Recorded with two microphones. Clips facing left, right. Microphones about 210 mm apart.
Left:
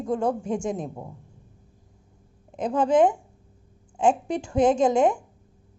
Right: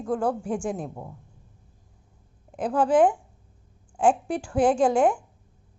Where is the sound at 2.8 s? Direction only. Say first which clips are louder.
Even; 5° right (ahead or behind).